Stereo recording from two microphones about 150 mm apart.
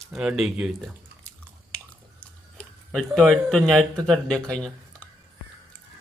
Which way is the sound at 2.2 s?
5° left (ahead or behind).